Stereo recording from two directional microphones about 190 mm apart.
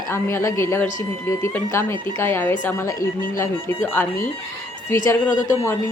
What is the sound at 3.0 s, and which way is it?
Speech, 45° left (ahead or behind).